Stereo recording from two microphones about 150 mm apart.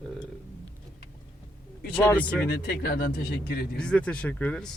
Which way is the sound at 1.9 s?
15° left (ahead or behind).